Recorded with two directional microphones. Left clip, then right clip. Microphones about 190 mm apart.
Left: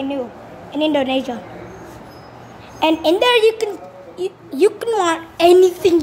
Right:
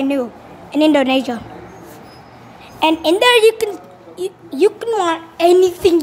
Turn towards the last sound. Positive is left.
turn(degrees=-5)  # may be behind; listen again after turning